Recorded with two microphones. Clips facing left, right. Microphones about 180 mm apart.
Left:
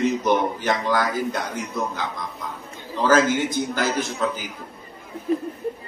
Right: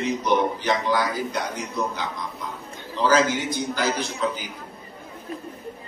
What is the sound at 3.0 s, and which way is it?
A man's voice, 50° left (ahead or behind).